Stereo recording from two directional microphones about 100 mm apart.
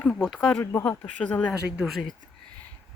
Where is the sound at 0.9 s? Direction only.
10° left (ahead or behind).